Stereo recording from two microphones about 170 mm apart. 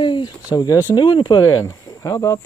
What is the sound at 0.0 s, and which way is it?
Speech, 25° left (ahead or behind).